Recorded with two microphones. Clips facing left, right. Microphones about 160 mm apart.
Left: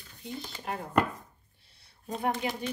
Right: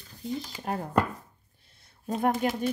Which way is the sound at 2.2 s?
50° right (ahead or behind).